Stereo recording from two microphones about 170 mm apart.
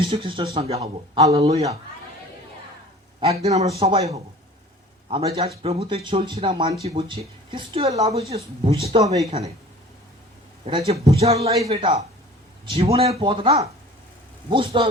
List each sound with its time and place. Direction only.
0.0 s speech: 30° right (ahead or behind)
1.3 s speech: 35° right (ahead or behind)
3.2 s a man's voice: 35° right (ahead or behind)
10.7 s speech: 35° right (ahead or behind)